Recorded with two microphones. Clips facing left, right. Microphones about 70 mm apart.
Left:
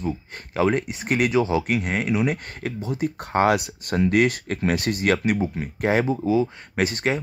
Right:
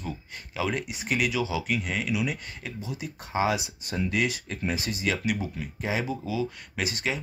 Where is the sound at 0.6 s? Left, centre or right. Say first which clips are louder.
Left 8 dB; left.